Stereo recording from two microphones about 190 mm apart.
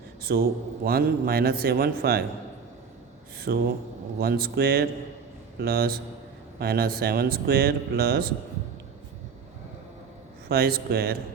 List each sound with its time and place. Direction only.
0.2 s a sound: 55° right (ahead or behind)
0.9 s speech: 55° right (ahead or behind)
3.5 s a man's voice: 55° right (ahead or behind)
10.5 s speech: 55° right (ahead or behind)